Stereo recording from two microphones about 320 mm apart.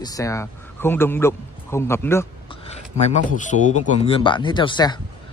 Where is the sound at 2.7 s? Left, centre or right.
Left.